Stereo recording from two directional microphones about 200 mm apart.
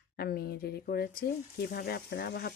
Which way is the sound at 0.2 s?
50° left (ahead or behind).